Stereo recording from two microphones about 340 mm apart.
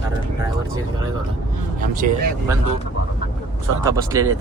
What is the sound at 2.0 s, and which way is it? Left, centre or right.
Speech, right.